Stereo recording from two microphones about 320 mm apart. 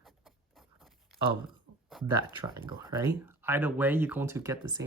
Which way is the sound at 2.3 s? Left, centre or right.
Centre.